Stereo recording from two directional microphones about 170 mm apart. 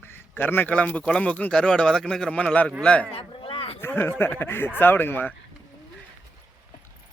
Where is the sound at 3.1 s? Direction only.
35° left (ahead or behind).